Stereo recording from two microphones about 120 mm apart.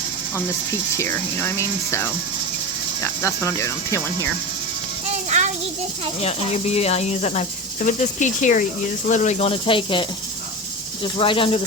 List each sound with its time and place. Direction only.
0.3 s speech: 20° left (ahead or behind)
5.0 s music: 75° right (ahead or behind)
6.2 s speech: 60° left (ahead or behind)
7.9 s speech: 90° left; by 9.5 s 75° left (ahead or behind)
9.5 s speech: 45° left (ahead or behind)